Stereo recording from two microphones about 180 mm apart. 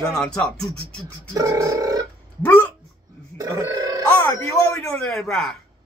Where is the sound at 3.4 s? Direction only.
15° right (ahead or behind).